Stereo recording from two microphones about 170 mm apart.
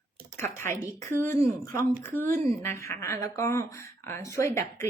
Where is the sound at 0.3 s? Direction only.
15° left (ahead or behind).